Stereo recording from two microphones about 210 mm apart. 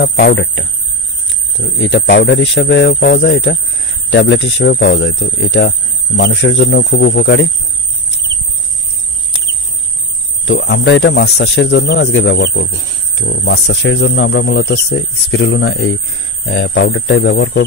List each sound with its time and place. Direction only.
0.1 s speech: 55° left (ahead or behind)
1.8 s speech: 60° left (ahead or behind)
2.9 s speech: 50° left (ahead or behind)
3.2 s speech: 65° left (ahead or behind)
10.4 s speech: 60° left (ahead or behind)